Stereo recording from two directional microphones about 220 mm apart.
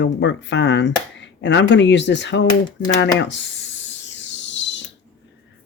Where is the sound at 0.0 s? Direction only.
55° left (ahead or behind).